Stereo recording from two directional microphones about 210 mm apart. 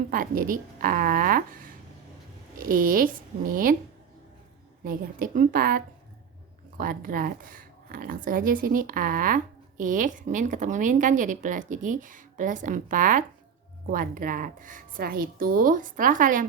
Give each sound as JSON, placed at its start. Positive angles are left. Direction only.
{"t": 0.1, "sound": "a woman's voice", "side_deg": -40}
{"t": 4.8, "sound": "a woman's voice", "side_deg": -40}